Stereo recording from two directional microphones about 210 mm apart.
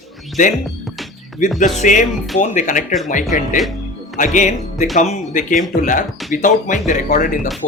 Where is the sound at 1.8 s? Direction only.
35° left (ahead or behind).